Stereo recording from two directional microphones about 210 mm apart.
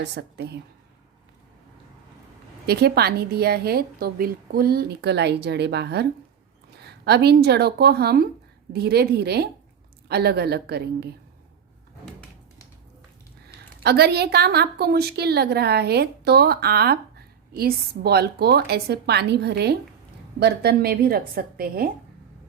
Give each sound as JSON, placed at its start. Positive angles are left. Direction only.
{"t": 0.0, "sound": "a woman's voice", "side_deg": -55}
{"t": 2.6, "sound": "a woman's voice", "side_deg": -50}
{"t": 13.8, "sound": "a woman's voice", "side_deg": -50}